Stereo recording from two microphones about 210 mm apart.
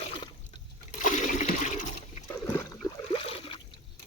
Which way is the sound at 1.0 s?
35° left (ahead or behind).